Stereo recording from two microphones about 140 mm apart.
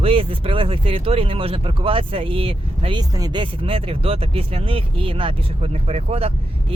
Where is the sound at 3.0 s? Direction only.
30° right (ahead or behind).